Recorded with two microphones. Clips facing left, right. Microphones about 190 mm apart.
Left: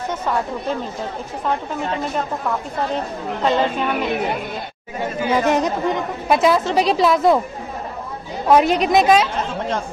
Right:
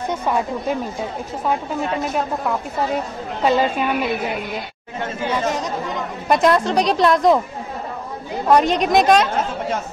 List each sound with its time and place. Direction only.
3.4 s speech: 10° right (ahead or behind)
5.4 s speech: 60° left (ahead or behind)
6.2 s a woman's voice: centre (ahead or behind)
8.5 s a woman's voice: 5° left (ahead or behind)